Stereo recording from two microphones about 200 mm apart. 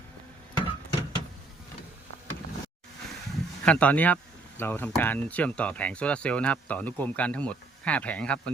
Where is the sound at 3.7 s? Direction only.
5° left (ahead or behind).